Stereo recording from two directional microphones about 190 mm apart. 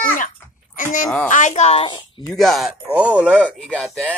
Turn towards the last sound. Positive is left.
turn(degrees=5)  # may be behind; listen again after turning